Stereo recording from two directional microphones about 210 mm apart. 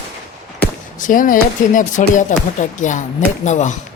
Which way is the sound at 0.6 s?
40° left (ahead or behind).